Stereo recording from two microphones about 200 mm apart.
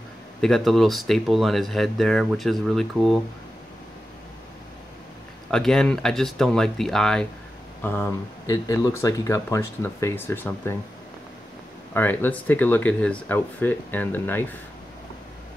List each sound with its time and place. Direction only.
0.4 s speech: centre (ahead or behind)
5.5 s speech: 5° left (ahead or behind)
11.9 s speech: 10° left (ahead or behind)